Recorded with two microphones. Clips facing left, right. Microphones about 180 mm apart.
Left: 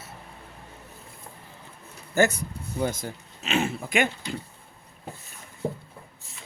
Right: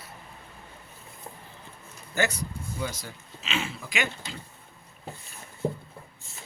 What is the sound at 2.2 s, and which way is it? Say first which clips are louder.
Speech: left 6 dB; 50° left (ahead or behind).